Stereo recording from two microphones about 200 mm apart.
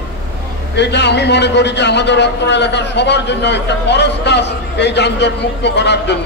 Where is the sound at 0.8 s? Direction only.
60° left (ahead or behind).